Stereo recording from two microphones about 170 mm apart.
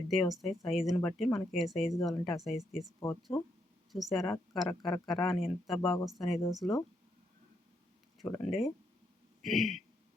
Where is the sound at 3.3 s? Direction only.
15° left (ahead or behind).